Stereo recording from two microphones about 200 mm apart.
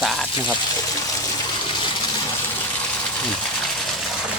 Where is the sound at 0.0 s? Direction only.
Centre (ahead or behind).